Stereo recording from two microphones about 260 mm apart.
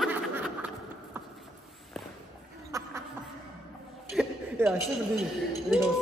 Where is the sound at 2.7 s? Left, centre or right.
Centre.